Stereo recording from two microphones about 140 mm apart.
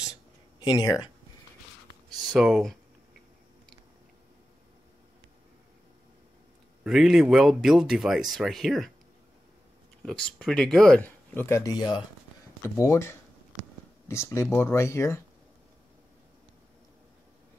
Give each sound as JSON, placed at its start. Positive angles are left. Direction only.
{"t": 0.6, "sound": "speech", "side_deg": 30}
{"t": 2.3, "sound": "speech", "side_deg": 0}
{"t": 6.8, "sound": "speech", "side_deg": 0}
{"t": 10.0, "sound": "speech", "side_deg": 5}